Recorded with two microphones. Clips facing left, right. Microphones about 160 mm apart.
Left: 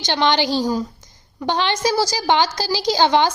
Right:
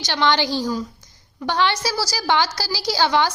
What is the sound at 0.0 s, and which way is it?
Speech, 20° left (ahead or behind).